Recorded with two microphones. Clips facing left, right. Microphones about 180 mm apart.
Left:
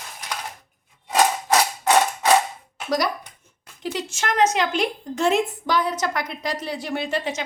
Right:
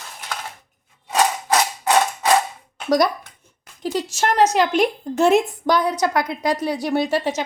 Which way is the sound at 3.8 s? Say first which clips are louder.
Right 5 dB; 40° right (ahead or behind).